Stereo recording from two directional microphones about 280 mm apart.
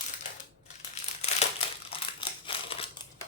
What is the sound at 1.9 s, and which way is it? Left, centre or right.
Crushing, centre.